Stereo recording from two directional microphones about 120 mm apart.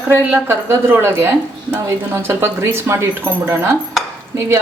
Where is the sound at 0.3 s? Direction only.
20° right (ahead or behind).